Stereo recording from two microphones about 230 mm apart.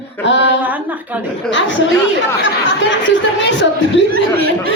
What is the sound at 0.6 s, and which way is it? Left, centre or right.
Speech, centre.